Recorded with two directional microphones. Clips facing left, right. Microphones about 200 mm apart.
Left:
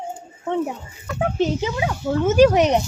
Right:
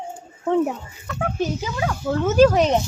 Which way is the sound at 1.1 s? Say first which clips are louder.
Left 3 dB; 20° left (ahead or behind).